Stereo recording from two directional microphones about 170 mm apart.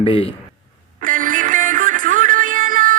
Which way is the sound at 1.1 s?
50° right (ahead or behind).